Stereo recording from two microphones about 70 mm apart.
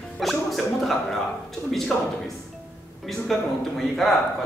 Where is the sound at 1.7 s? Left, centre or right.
Centre.